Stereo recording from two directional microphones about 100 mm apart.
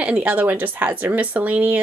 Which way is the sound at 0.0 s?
10° right (ahead or behind).